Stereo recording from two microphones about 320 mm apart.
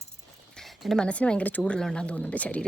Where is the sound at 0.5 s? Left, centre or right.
Centre.